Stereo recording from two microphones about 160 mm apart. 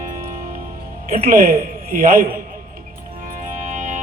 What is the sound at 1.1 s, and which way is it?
A man's voice, 60° right (ahead or behind).